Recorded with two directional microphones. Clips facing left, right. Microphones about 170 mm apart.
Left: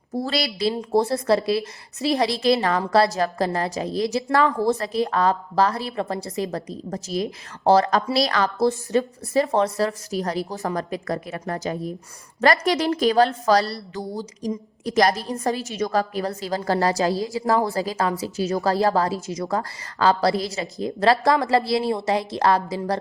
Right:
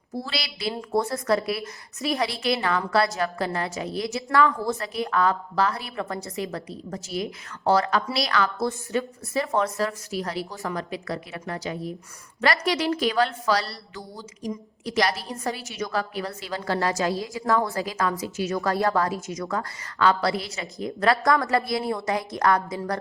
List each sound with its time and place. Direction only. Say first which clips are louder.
0.1 s a woman's voice: left 7 dB; 45° left (ahead or behind)
0.7 s a woman's voice: left 3 dB; 25° left (ahead or behind)
8.0 s a woman's voice: left 4 dB; 30° left (ahead or behind)